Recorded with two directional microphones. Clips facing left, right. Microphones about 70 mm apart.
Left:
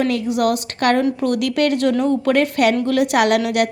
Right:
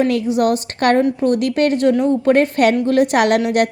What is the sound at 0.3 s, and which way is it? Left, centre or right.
A woman's voice, right.